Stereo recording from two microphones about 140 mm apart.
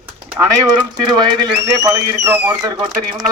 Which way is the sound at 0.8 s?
35° right (ahead or behind).